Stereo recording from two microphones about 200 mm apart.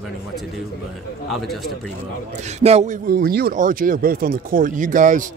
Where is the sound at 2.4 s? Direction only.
35° right (ahead or behind).